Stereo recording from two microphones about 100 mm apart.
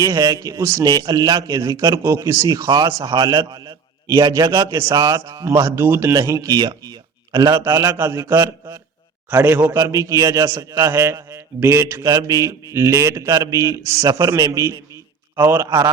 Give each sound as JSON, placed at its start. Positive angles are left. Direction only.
{"t": 0.2, "sound": "a man's voice", "side_deg": -35}
{"t": 1.8, "sound": "a man's voice", "side_deg": -25}
{"t": 6.1, "sound": "speech", "side_deg": -35}
{"t": 7.5, "sound": "a man's voice", "side_deg": -25}
{"t": 9.8, "sound": "a man's voice", "side_deg": -35}
{"t": 15.4, "sound": "a man's voice", "side_deg": -20}